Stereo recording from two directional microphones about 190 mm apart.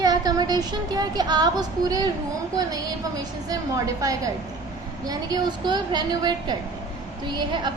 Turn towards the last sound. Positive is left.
turn(degrees=-25)  # may be behind; listen again after turning